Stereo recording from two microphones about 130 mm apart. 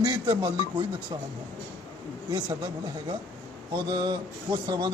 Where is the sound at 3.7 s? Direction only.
30° right (ahead or behind).